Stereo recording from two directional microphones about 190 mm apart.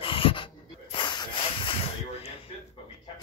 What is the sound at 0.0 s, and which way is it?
Dog, 25° left (ahead or behind).